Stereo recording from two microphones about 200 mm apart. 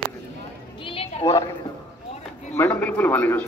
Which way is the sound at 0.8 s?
30° left (ahead or behind).